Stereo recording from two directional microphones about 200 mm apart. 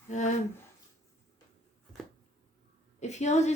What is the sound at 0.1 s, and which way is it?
Speech, 35° left (ahead or behind).